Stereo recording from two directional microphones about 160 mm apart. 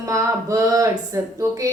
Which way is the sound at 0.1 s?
20° right (ahead or behind).